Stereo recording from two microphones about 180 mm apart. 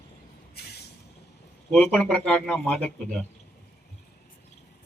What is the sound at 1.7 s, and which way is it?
Speech, 5° left (ahead or behind).